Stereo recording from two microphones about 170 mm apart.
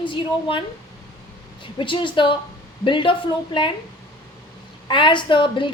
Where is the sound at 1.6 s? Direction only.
30° left (ahead or behind).